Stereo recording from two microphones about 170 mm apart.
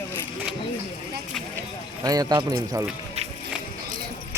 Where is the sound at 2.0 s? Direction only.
20° right (ahead or behind).